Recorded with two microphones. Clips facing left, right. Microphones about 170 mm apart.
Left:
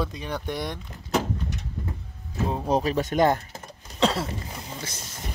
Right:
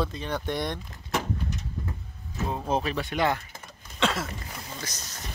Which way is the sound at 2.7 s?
40° left (ahead or behind).